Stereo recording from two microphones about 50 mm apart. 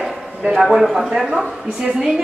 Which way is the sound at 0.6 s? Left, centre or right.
Centre.